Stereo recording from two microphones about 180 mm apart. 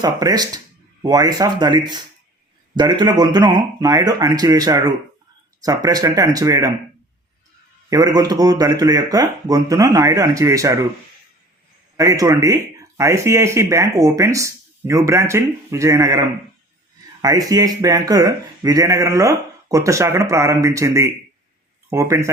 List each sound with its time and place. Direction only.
0.0 s speech: 20° right (ahead or behind)
7.9 s speech: 20° right (ahead or behind)
11.9 s speech: 20° right (ahead or behind)